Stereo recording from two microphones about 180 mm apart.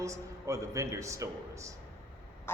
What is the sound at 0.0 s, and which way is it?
Speech, 15° right (ahead or behind).